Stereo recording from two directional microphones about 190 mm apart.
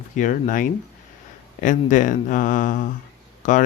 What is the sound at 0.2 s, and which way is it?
Speech, 45° left (ahead or behind).